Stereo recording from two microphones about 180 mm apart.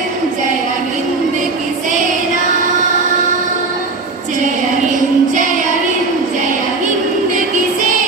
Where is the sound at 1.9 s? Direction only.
45° right (ahead or behind).